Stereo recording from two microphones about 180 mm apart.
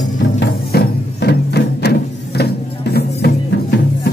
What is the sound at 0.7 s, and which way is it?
Music, 65° left (ahead or behind).